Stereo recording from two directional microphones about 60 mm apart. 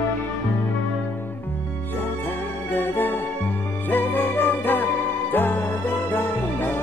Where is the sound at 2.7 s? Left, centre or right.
Left.